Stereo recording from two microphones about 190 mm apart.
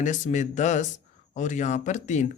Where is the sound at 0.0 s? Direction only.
40° left (ahead or behind).